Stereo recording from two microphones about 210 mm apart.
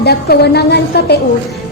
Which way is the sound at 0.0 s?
50° left (ahead or behind).